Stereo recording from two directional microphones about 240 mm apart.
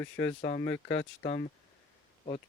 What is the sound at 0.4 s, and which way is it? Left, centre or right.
Speech, left.